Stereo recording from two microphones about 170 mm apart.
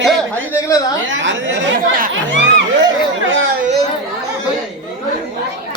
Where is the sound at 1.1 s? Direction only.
90° right.